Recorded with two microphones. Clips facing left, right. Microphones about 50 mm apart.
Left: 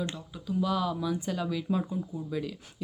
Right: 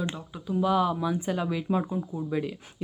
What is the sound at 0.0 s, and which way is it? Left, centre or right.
Speech, centre.